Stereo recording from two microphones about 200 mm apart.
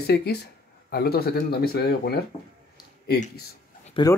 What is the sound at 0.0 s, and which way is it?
Speech, 55° left (ahead or behind).